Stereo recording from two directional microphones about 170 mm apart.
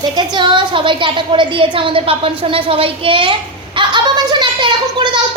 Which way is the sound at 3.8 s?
25° right (ahead or behind).